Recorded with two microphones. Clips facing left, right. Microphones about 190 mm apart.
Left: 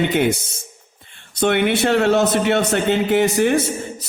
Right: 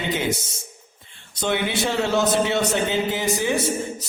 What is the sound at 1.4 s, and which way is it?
A man's voice, 65° left (ahead or behind).